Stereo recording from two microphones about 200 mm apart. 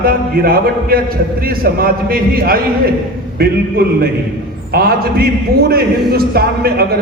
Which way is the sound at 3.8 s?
50° right (ahead or behind).